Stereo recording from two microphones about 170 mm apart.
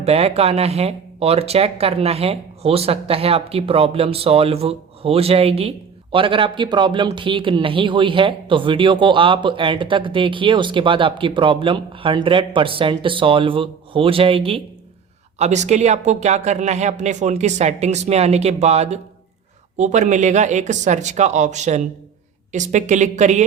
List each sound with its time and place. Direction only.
0.0 s speech: 35° right (ahead or behind)